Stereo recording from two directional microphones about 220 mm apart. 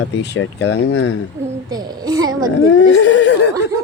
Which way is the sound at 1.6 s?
20° right (ahead or behind).